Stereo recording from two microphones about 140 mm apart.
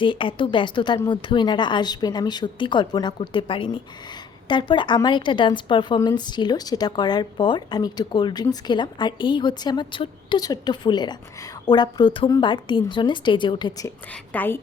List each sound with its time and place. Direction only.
0.0 s a woman's voice: 35° left (ahead or behind)
14.3 s a woman's voice: 15° left (ahead or behind)